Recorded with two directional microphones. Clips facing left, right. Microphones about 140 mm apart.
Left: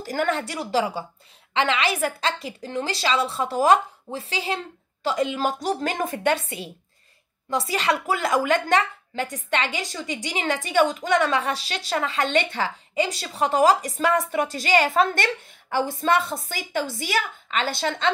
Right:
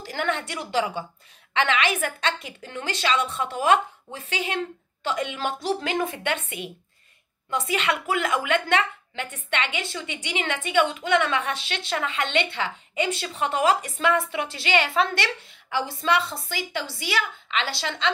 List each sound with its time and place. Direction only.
0.0 s a woman's voice: 40° left (ahead or behind)